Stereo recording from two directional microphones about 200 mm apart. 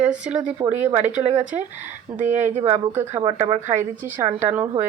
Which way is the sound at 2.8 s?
10° right (ahead or behind).